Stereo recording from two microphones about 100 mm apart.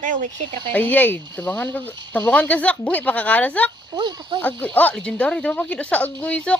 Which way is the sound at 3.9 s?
45° right (ahead or behind).